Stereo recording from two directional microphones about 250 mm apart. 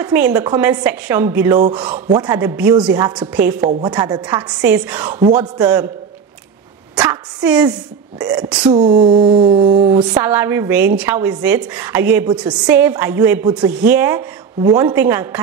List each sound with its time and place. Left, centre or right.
0.0 s a woman's voice: centre
3.8 s a woman's voice: centre
5.2 s a sound: centre
5.6 s a woman's voice: centre
7.0 s a woman's voice: centre
8.5 s a woman's voice: centre
9.2 s a sound: right
9.8 s a woman's voice: centre